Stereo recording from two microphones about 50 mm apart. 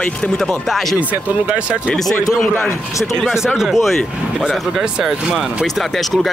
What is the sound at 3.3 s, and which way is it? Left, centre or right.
Speech, centre.